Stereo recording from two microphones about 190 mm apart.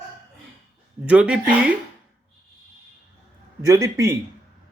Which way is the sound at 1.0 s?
5° right (ahead or behind).